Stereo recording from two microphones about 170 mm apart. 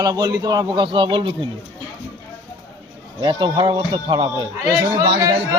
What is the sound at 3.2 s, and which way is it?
Speech, 30° right (ahead or behind).